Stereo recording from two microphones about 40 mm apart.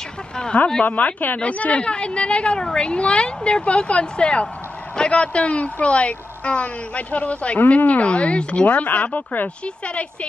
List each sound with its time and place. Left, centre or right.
0.8 s a woman's voice: left